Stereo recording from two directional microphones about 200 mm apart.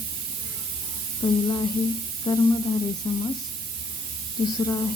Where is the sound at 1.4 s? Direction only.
20° left (ahead or behind).